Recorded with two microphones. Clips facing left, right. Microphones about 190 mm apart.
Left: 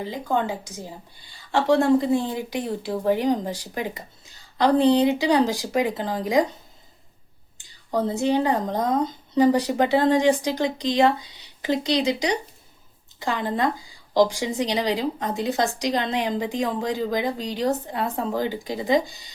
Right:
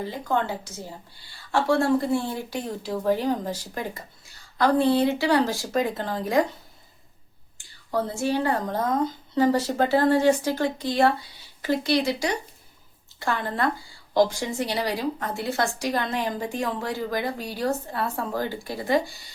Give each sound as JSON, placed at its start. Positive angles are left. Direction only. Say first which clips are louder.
{"t": 0.0, "sound": "speech", "louder": "left 1 dB", "side_deg": 15}
{"t": 7.6, "sound": "speech", "louder": "left 3 dB", "side_deg": 20}